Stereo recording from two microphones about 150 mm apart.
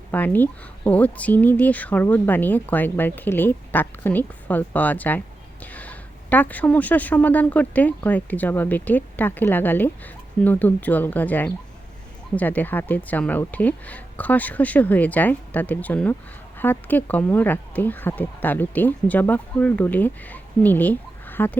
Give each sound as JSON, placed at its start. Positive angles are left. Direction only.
{"t": 0.1, "sound": "speech", "side_deg": 10}